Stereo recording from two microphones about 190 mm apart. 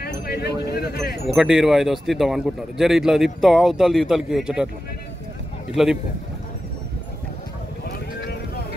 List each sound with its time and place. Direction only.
0.0 s speech: 55° left (ahead or behind)
1.3 s a man's voice: centre (ahead or behind)
8.2 s vehicle: 60° left (ahead or behind)